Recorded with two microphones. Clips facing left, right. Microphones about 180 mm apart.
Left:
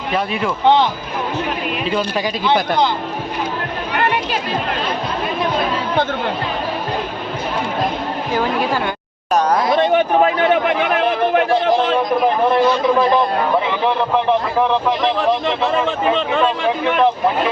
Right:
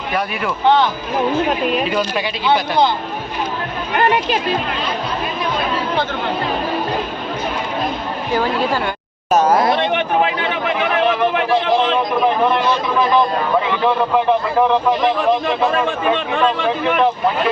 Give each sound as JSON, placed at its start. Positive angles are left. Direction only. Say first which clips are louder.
{"t": 9.3, "sound": "speech", "louder": "right 2 dB", "side_deg": -5}
{"t": 9.8, "sound": "speech", "louder": "left 3 dB", "side_deg": 40}